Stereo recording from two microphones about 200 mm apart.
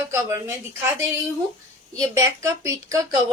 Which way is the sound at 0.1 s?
15° right (ahead or behind).